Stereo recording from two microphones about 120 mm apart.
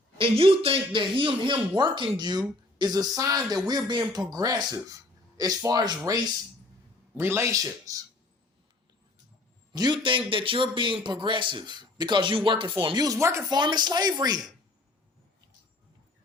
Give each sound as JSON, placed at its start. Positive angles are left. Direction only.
{"t": 0.2, "sound": "a man's voice", "side_deg": -50}
{"t": 7.2, "sound": "speech", "side_deg": -20}
{"t": 9.7, "sound": "a man's voice", "side_deg": -35}
{"t": 13.5, "sound": "a man's voice", "side_deg": -35}